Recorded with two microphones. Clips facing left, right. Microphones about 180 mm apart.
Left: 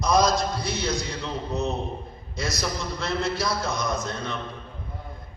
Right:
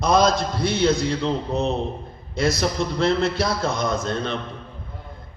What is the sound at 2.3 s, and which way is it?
Music, 60° right (ahead or behind).